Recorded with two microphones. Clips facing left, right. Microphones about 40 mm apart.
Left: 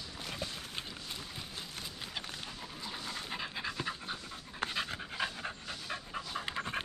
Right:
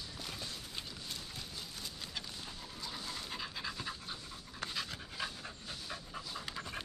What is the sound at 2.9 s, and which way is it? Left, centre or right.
Pant, left.